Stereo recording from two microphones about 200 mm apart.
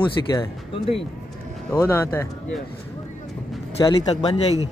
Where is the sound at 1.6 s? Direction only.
10° left (ahead or behind).